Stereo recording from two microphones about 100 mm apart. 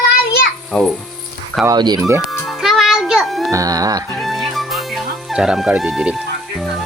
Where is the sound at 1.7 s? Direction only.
45° right (ahead or behind).